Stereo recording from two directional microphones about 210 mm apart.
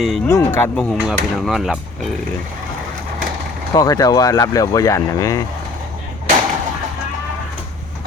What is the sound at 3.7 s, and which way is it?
Speech, 20° left (ahead or behind).